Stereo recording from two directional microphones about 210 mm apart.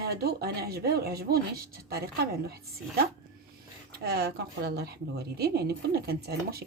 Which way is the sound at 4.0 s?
50° right (ahead or behind).